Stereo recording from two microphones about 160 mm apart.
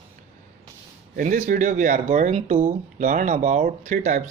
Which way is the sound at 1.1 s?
55° right (ahead or behind).